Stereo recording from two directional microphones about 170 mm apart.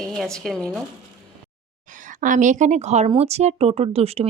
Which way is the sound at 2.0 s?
50° right (ahead or behind).